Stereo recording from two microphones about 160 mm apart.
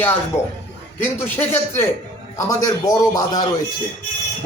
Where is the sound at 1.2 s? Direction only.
15° left (ahead or behind).